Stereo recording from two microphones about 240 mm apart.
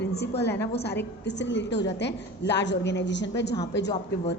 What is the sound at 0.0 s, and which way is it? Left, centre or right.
A woman's voice, left.